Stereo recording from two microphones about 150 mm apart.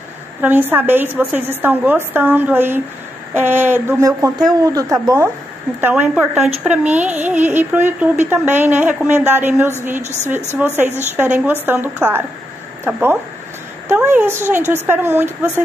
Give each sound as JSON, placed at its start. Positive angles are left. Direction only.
{"t": 0.4, "sound": "a woman's voice", "side_deg": -10}